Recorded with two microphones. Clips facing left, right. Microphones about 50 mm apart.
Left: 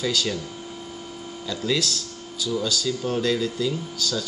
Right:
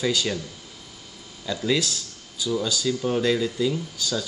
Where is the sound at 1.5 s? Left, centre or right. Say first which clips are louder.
Right 1 dB; centre.